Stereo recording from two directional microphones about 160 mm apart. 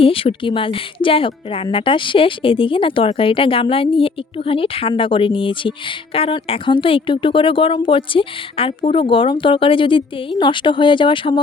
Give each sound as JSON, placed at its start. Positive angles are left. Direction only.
{"t": 0.0, "sound": "a woman's voice", "side_deg": 35}